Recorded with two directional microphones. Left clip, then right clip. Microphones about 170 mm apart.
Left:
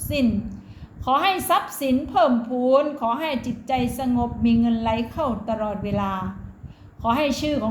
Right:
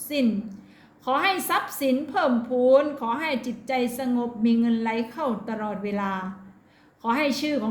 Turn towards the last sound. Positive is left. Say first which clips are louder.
# left 2 dB
turn(degrees=-35)  # may be behind; listen again after turning